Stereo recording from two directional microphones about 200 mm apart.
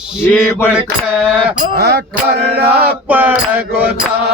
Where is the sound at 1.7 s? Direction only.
55° right (ahead or behind).